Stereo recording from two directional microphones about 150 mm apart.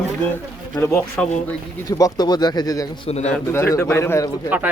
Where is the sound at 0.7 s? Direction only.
20° left (ahead or behind).